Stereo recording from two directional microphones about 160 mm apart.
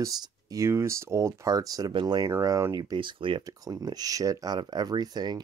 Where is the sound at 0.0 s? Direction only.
20° right (ahead or behind).